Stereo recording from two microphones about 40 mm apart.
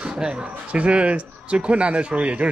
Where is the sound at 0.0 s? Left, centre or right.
Right.